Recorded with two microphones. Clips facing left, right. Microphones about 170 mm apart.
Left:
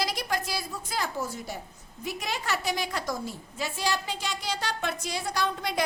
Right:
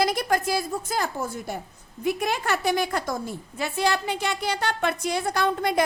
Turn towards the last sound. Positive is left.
turn(degrees=-50)  # may be behind; listen again after turning